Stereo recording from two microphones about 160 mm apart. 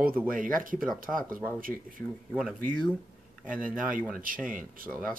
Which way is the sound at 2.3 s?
5° right (ahead or behind).